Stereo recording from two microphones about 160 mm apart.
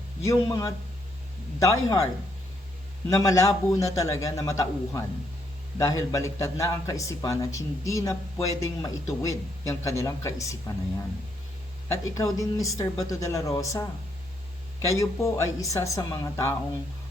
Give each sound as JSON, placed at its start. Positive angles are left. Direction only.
{"t": 0.3, "sound": "a man's voice", "side_deg": 20}
{"t": 3.1, "sound": "a man's voice", "side_deg": 20}
{"t": 11.9, "sound": "a man's voice", "side_deg": 20}
{"t": 14.8, "sound": "a man's voice", "side_deg": 20}